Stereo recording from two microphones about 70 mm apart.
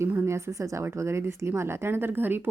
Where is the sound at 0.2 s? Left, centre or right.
Right.